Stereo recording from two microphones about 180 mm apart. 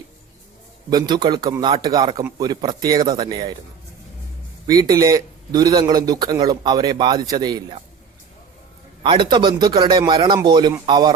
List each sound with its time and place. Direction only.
0.9 s a man's voice: 25° right (ahead or behind)
4.6 s a man's voice: 20° right (ahead or behind)
9.0 s a man's voice: 25° right (ahead or behind)